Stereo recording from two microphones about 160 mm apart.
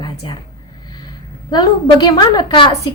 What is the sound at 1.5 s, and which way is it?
A woman's voice, 25° left (ahead or behind).